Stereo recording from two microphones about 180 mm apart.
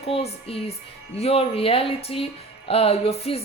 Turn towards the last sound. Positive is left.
turn(degrees=35)  # may be behind; listen again after turning